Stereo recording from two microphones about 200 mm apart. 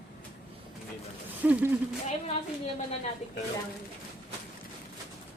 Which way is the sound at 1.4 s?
10° right (ahead or behind).